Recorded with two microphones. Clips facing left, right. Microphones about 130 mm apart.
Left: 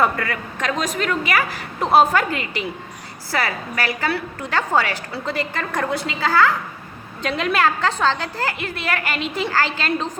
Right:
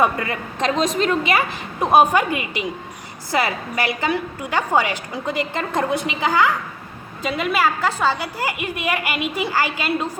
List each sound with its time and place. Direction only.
0.0 s a woman's voice: 20° right (ahead or behind)
7.2 s a woman's voice: 5° right (ahead or behind)